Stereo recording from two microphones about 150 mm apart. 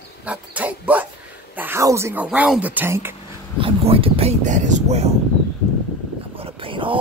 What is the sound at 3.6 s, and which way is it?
Speech, 40° right (ahead or behind).